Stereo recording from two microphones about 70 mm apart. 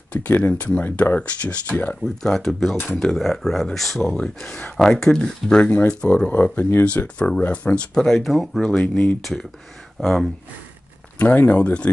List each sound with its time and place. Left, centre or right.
0.1 s speech: left
2.2 s speech: centre
4.7 s speech: centre
11.1 s speech: left